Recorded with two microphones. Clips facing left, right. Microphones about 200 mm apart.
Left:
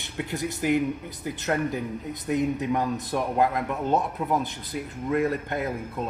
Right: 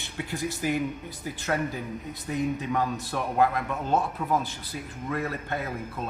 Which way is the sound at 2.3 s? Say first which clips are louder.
Left 3 dB; 20° left (ahead or behind).